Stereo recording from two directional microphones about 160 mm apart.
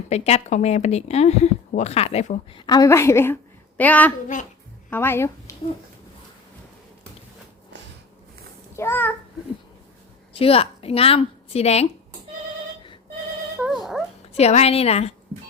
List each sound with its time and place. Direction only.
0.1 s speech: 45° left (ahead or behind)
2.6 s a woman's voice: 25° left (ahead or behind)
8.7 s a child's voice: 15° left (ahead or behind)
10.3 s a woman's voice: 35° left (ahead or behind)
13.6 s dog: centre (ahead or behind)
14.3 s a woman's voice: 40° left (ahead or behind)